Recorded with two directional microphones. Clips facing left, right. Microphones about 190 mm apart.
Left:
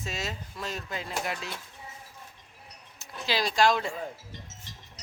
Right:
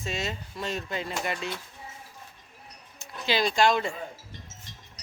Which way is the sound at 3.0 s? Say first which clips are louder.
Right 3 dB; centre (ahead or behind).